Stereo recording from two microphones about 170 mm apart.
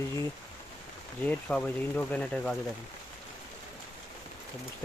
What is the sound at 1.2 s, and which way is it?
Speech, 10° left (ahead or behind).